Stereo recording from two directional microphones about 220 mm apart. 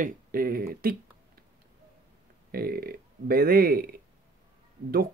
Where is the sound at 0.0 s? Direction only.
40° right (ahead or behind).